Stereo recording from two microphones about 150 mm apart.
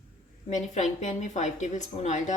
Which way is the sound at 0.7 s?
50° left (ahead or behind).